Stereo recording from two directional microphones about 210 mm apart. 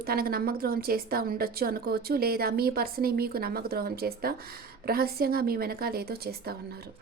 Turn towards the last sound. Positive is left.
turn(degrees=-50)  # may be behind; listen again after turning